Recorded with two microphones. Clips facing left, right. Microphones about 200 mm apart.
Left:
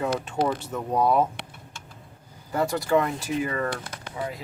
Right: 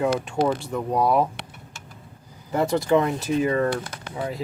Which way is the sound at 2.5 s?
25° right (ahead or behind).